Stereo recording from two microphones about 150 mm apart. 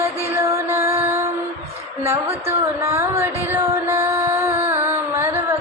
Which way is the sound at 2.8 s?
15° right (ahead or behind).